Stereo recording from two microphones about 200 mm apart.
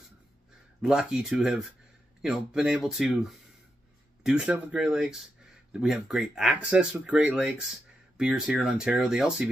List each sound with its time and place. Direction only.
0.8 s speech: 5° right (ahead or behind)